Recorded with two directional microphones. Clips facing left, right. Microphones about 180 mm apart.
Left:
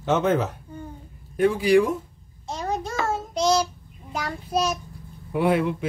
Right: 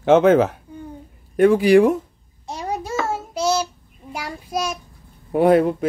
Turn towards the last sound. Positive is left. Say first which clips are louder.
# right 7 dB
turn(degrees=-40)  # may be behind; listen again after turning